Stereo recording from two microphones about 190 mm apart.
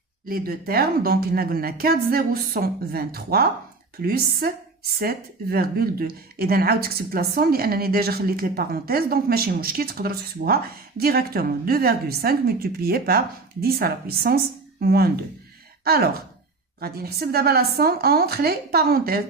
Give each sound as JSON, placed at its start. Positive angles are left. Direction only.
{"t": 0.3, "sound": "a woman's voice", "side_deg": -50}